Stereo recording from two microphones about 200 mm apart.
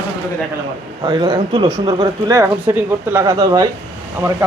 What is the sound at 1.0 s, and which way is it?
A man's voice, 20° right (ahead or behind).